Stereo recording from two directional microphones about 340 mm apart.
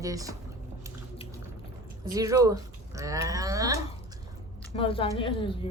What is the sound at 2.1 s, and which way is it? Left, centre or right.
Speech, centre.